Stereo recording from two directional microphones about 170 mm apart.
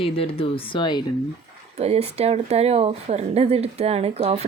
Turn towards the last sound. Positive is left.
turn(degrees=-40)  # may be behind; listen again after turning